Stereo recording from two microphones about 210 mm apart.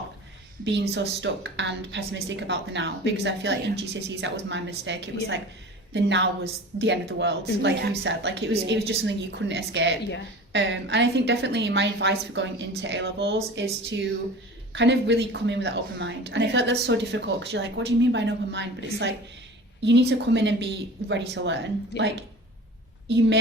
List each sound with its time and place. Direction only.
0.6 s a woman's voice: 55° right (ahead or behind)
14.7 s a woman's voice: 55° right (ahead or behind)